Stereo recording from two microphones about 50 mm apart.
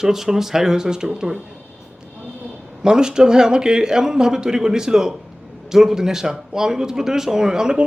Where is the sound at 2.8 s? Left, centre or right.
Centre.